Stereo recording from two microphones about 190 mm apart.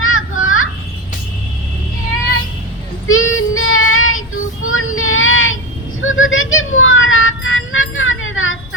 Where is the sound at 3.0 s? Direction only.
90° left.